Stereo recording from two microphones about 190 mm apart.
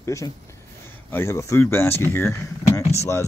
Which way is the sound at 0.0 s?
15° left (ahead or behind).